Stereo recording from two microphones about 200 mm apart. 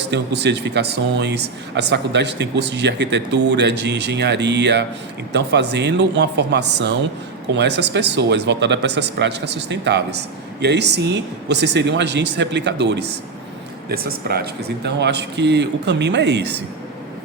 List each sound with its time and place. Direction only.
0.1 s speech: 60° right (ahead or behind)
13.9 s speech: 50° right (ahead or behind)